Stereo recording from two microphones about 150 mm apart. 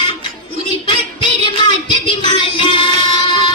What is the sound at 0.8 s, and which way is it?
Child singing, 30° left (ahead or behind).